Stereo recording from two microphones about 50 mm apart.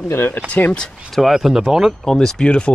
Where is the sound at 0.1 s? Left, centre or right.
Left.